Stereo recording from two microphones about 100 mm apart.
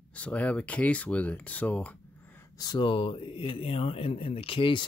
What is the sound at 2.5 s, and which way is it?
Speech, 45° left (ahead or behind).